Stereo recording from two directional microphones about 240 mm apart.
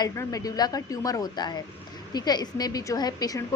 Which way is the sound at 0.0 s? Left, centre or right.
Centre.